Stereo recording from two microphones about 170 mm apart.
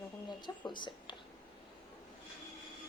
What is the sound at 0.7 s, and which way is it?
Speech, 25° left (ahead or behind).